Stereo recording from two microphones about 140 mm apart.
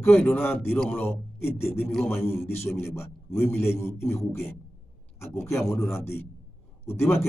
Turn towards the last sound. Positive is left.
turn(degrees=20)  # may be behind; listen again after turning